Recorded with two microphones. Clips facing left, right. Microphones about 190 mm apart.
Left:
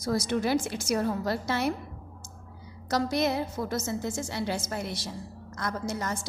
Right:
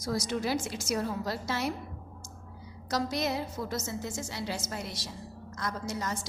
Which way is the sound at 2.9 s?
55° left (ahead or behind).